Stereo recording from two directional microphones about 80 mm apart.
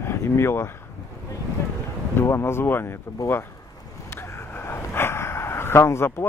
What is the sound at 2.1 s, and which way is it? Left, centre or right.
Speech, left.